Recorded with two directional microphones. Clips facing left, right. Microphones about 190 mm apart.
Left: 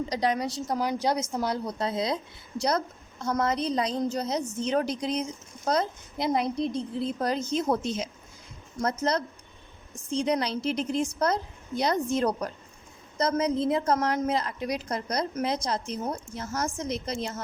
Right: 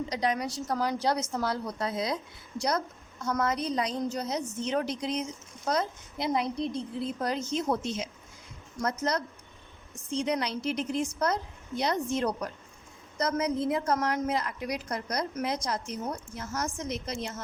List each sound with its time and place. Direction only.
0.1 s a woman's voice: 35° left (ahead or behind)
13.1 s a woman's voice: 30° left (ahead or behind)